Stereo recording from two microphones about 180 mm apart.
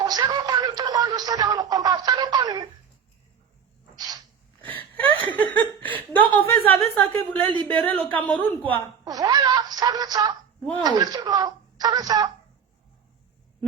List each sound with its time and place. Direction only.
0.0 s music: 25° right (ahead or behind)
4.6 s whimper: 10° left (ahead or behind)
5.4 s chuckle: 10° left (ahead or behind)
7.7 s a woman's voice: 10° left (ahead or behind)
9.0 s a woman's voice: 20° right (ahead or behind)